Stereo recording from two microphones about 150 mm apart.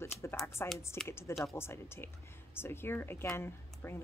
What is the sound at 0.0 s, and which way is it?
A woman's voice, 15° left (ahead or behind).